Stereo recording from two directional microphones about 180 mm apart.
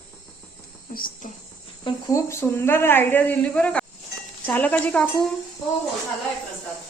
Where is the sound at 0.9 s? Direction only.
50° left (ahead or behind).